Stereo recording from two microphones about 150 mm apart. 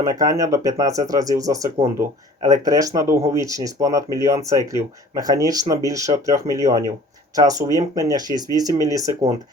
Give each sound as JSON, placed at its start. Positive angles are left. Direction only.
{"t": 0.0, "sound": "speech", "side_deg": -25}